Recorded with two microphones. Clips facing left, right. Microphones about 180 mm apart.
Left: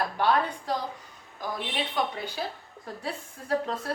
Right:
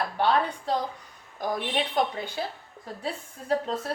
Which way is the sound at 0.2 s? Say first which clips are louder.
Right 2 dB; 25° right (ahead or behind).